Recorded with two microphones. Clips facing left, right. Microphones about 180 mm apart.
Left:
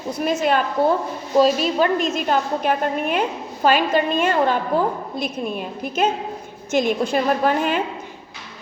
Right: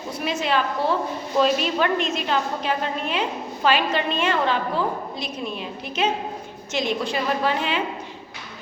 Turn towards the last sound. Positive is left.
turn(degrees=50)  # may be behind; listen again after turning